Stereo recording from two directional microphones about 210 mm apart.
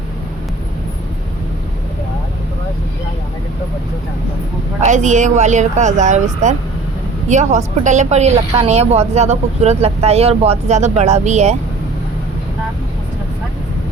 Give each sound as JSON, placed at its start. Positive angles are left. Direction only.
{"t": 4.8, "sound": "a woman's voice", "side_deg": -35}